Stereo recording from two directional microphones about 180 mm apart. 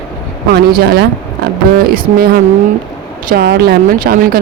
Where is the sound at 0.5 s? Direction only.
60° right (ahead or behind).